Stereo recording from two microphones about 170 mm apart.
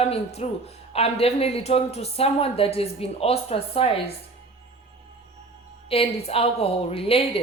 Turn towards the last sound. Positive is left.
turn(degrees=35)  # may be behind; listen again after turning